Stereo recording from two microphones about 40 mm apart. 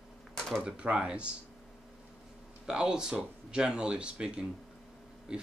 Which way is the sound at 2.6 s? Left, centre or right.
Right.